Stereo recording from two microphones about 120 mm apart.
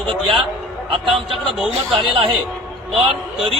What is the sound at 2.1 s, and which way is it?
Speech, 50° right (ahead or behind).